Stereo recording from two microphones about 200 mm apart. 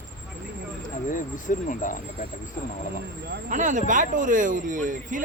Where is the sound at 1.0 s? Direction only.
40° left (ahead or behind).